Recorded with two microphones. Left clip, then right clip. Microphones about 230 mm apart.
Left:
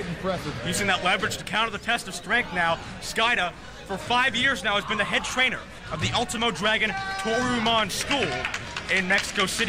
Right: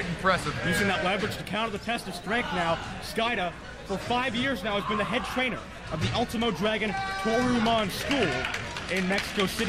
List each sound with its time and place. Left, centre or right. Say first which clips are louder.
0.8 s speech: left 4 dB; centre